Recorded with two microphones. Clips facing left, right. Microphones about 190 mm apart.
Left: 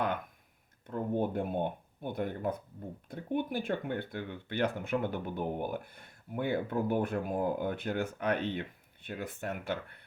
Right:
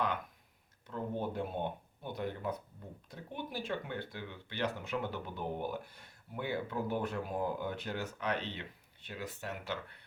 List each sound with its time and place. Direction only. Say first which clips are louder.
0.9 s speech: left 5 dB; 55° left (ahead or behind)